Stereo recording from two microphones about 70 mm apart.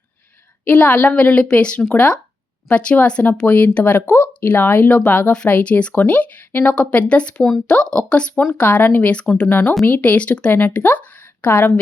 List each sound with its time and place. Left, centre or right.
0.6 s speech: centre